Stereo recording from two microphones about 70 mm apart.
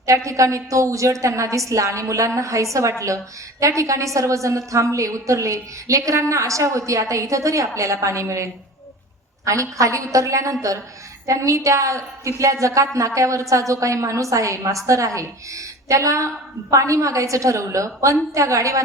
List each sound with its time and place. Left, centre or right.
0.3 s a woman's voice: right